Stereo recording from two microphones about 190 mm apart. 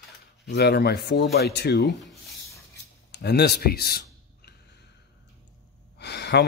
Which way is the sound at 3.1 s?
60° left (ahead or behind).